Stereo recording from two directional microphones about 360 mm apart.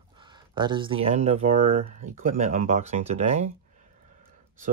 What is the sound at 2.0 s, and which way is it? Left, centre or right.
Speech, right.